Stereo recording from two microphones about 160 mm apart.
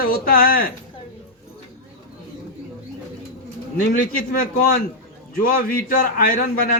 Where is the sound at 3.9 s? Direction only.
60° left (ahead or behind).